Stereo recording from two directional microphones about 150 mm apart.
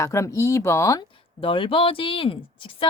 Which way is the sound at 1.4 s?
35° left (ahead or behind).